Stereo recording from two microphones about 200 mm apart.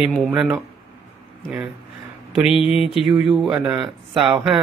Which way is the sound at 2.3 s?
Centre (ahead or behind).